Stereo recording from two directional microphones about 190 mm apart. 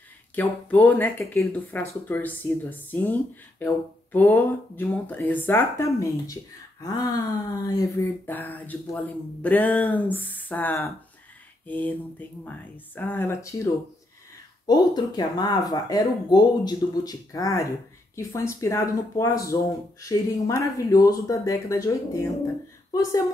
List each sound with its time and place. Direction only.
0.4 s speech: 10° left (ahead or behind)
14.7 s speech: 20° left (ahead or behind)